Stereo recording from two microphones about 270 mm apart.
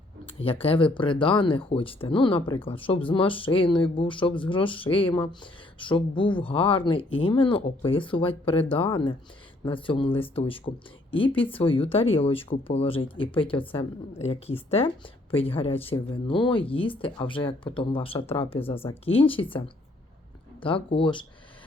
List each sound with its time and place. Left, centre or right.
0.6 s speech: centre